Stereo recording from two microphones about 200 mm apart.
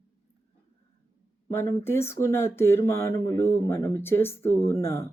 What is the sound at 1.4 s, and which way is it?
Speech, 15° left (ahead or behind).